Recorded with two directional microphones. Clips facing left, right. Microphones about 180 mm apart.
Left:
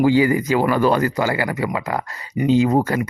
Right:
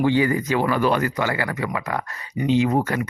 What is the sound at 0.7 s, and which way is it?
Speech, 40° left (ahead or behind).